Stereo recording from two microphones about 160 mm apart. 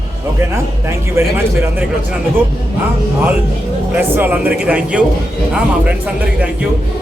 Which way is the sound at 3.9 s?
10° right (ahead or behind).